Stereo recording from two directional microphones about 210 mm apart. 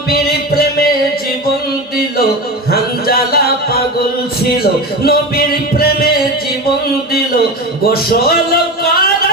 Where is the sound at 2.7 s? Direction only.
45° left (ahead or behind).